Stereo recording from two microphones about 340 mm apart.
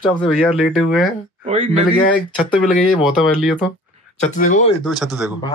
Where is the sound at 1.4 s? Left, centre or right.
Centre.